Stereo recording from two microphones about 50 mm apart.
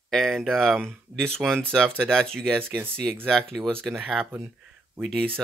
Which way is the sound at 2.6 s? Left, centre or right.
Right.